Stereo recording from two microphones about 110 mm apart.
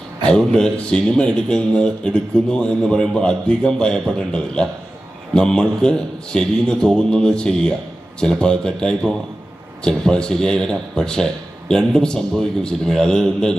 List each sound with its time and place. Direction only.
0.3 s a man's voice: 5° left (ahead or behind)